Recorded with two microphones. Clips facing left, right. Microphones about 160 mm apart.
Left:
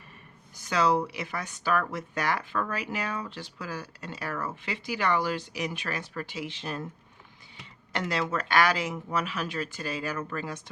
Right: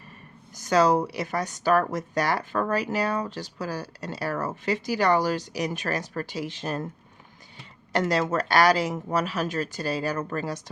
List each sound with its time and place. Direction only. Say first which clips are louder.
0.5 s speech: right 5 dB; 40° right (ahead or behind)
7.9 s speech: right 6 dB; 40° right (ahead or behind)